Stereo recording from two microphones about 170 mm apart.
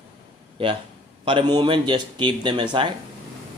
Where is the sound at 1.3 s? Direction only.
25° right (ahead or behind).